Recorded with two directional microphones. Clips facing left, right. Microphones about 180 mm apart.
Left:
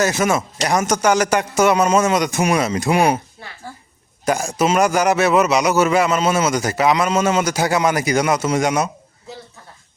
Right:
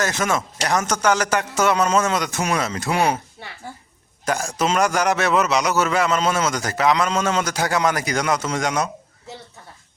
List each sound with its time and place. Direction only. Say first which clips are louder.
0.0 s a man's voice: left 4 dB; 10° left (ahead or behind)
4.3 s a man's voice: left 4 dB; 10° left (ahead or behind)